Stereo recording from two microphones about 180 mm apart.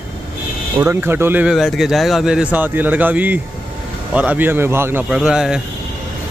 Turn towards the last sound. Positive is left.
turn(degrees=-5)  # may be behind; listen again after turning